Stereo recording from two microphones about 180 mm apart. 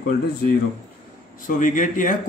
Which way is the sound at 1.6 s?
45° left (ahead or behind).